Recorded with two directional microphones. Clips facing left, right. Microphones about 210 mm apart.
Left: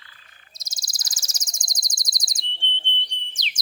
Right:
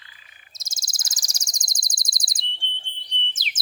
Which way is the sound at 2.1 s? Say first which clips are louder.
Even; 30° right (ahead or behind).